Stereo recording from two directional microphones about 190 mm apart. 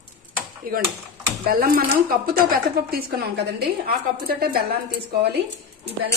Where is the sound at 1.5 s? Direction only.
50° right (ahead or behind).